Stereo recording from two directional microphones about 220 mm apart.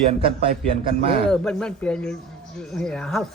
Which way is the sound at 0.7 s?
25° right (ahead or behind).